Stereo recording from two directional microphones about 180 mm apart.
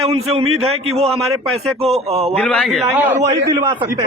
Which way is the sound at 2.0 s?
35° right (ahead or behind).